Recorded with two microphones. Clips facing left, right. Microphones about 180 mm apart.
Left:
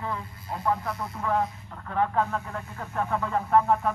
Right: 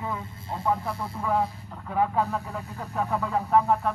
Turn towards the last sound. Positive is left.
turn(degrees=0)  # may be behind; listen again after turning